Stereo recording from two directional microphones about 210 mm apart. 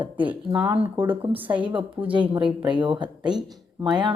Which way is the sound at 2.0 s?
25° right (ahead or behind).